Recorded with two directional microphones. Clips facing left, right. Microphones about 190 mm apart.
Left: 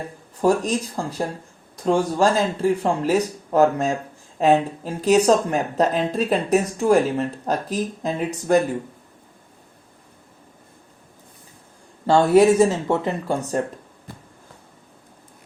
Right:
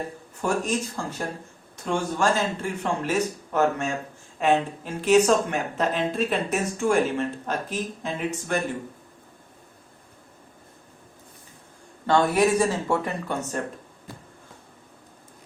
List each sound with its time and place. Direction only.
0.4 s speech: 35° left (ahead or behind)
12.0 s speech: 30° left (ahead or behind)